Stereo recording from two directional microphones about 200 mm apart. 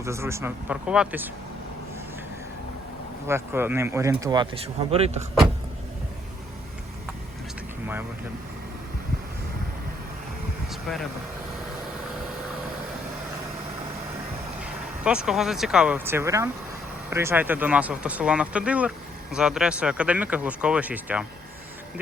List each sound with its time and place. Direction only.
0.0 s speech: 15° right (ahead or behind)
3.2 s speech: 10° right (ahead or behind); by 5.2 s 30° right (ahead or behind)
10.7 s vehicle: centre (ahead or behind)
14.6 s speech: 5° right (ahead or behind)